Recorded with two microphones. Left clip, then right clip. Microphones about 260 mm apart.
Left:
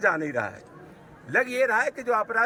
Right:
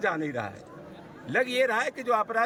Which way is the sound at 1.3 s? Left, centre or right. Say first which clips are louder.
Left 2 dB; centre.